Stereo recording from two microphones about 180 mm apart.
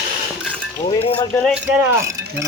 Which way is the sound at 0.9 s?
30° left (ahead or behind).